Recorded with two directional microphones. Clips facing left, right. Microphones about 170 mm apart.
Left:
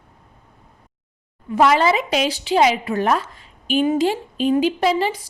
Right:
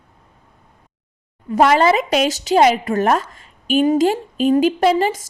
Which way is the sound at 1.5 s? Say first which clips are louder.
Right 2 dB; 45° right (ahead or behind).